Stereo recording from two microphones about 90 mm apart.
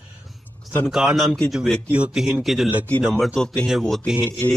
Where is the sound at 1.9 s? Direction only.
10° right (ahead or behind).